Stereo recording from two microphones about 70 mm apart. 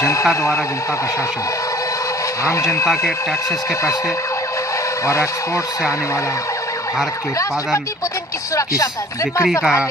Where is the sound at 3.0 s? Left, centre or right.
Left.